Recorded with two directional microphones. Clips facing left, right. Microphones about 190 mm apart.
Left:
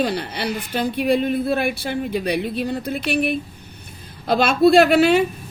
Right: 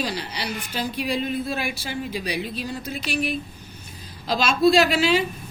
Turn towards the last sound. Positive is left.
turn(degrees=55)  # may be behind; listen again after turning